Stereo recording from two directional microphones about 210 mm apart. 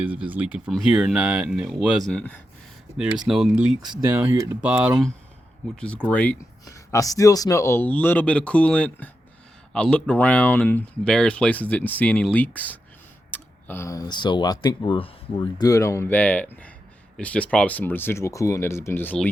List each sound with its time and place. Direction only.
0.0 s speech: 5° right (ahead or behind)
3.8 s speech: 20° right (ahead or behind)
4.1 s speech: 10° right (ahead or behind)
5.7 s speech: 5° left (ahead or behind)